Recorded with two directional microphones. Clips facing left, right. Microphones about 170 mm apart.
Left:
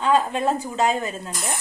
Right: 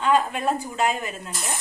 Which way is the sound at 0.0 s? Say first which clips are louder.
Left 1 dB; 30° left (ahead or behind).